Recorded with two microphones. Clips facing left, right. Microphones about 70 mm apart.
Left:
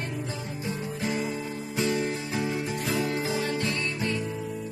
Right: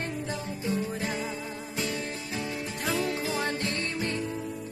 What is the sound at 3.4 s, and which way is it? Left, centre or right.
Music, right.